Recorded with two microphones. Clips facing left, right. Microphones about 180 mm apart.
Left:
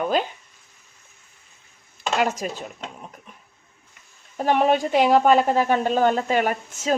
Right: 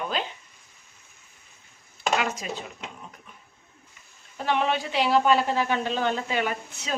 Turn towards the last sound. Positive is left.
turn(degrees=45)  # may be behind; listen again after turning